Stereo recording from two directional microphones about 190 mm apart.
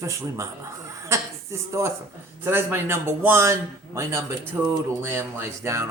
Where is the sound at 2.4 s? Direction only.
10° right (ahead or behind).